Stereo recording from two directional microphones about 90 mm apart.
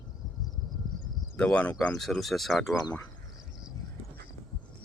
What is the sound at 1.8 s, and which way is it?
Speech, 5° left (ahead or behind).